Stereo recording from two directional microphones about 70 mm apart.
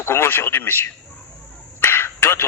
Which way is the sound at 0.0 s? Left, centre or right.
Left.